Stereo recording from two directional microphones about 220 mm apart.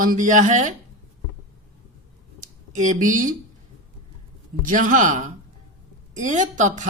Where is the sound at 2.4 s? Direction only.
35° right (ahead or behind).